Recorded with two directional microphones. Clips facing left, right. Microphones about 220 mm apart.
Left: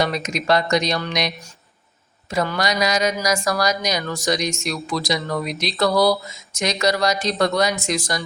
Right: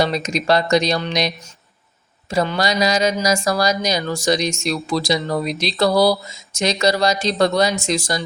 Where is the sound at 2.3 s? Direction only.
25° right (ahead or behind).